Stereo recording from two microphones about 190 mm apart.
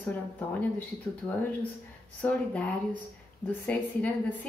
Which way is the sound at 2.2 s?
5° left (ahead or behind).